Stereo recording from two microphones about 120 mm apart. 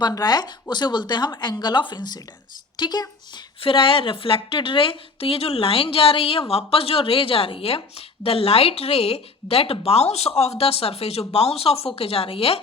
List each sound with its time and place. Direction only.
0.0 s speech: 35° left (ahead or behind)
3.6 s a woman's voice: 50° left (ahead or behind)